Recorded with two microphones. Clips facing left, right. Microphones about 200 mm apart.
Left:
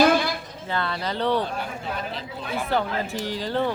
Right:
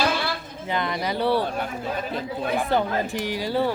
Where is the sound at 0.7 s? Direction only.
15° right (ahead or behind).